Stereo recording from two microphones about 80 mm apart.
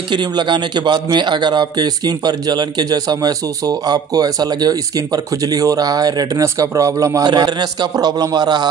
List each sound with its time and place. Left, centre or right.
0.1 s a man's voice: right
6.4 s speech: right
7.2 s speech: right
7.9 s speech: right